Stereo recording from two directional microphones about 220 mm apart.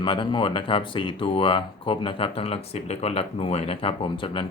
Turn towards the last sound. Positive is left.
turn(degrees=25)  # may be behind; listen again after turning